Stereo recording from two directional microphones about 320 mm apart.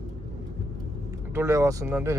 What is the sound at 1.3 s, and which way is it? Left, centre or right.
Speech, centre.